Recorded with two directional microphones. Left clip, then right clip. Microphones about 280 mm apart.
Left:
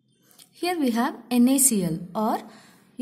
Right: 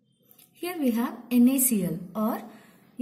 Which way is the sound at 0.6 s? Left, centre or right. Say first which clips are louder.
Left 4 dB; centre.